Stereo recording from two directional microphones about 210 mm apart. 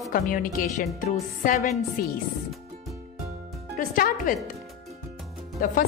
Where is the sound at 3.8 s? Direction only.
40° left (ahead or behind).